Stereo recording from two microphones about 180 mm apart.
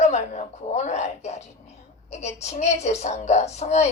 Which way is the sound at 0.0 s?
40° left (ahead or behind).